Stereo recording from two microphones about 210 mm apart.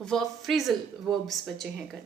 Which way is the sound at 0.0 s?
Centre (ahead or behind).